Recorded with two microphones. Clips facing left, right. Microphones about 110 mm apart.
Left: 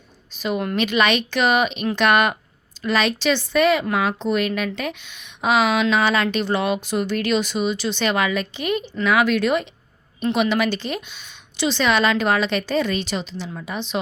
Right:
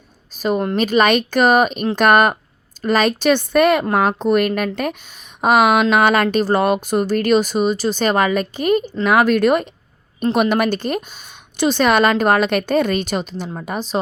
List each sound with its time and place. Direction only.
0.3 s speech: 40° right (ahead or behind)